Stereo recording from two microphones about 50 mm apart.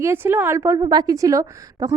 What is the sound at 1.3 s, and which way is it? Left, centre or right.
Speech, right.